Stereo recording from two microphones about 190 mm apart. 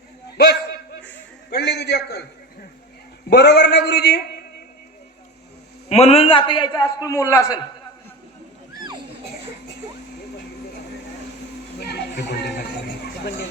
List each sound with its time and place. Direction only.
1.5 s a man's voice: 60° left (ahead or behind)
3.2 s a man's voice: 60° left (ahead or behind)
5.9 s a man's voice: 35° left (ahead or behind); by 7.6 s 20° left (ahead or behind)
8.7 s a sound: 20° right (ahead or behind)
11.8 s music: 60° left (ahead or behind)